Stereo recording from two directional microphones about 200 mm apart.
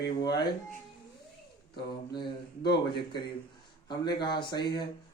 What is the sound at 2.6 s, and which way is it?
Speech, 25° left (ahead or behind).